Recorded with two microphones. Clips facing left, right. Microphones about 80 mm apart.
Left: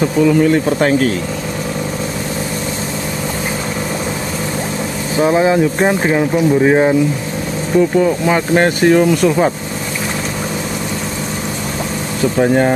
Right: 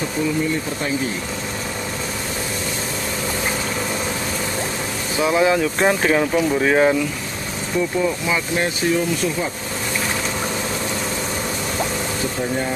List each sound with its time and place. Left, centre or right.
0.2 s speech: left
5.1 s speech: left
8.3 s speech: left
12.4 s speech: left